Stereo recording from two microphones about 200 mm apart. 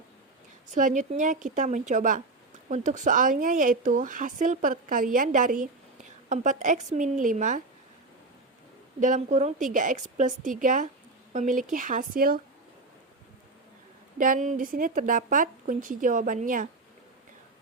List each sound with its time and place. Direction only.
0.7 s speech: 40° right (ahead or behind)
9.0 s speech: 40° right (ahead or behind)
14.2 s speech: 40° right (ahead or behind)